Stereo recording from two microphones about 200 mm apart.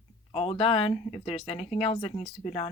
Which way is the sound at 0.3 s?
25° left (ahead or behind).